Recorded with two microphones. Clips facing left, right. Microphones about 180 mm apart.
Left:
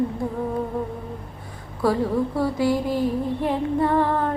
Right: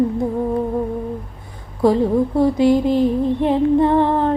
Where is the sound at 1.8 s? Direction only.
20° right (ahead or behind).